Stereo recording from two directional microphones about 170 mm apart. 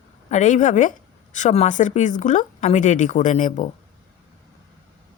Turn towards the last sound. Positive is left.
turn(degrees=50)  # may be behind; listen again after turning